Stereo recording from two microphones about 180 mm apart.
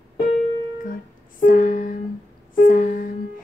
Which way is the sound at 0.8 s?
50° left (ahead or behind).